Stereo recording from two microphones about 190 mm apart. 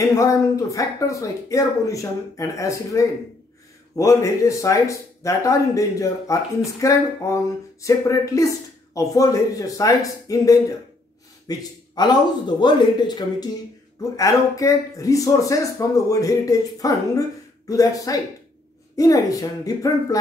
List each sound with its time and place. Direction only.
0.1 s a man's voice: 15° left (ahead or behind)